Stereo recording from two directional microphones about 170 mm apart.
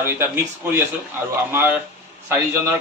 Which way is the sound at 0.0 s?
10° right (ahead or behind).